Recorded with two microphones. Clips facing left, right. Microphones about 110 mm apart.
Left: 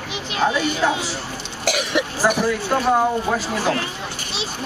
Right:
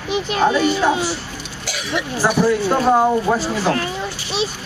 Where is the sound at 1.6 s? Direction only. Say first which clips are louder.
Left 4 dB; 60° left (ahead or behind).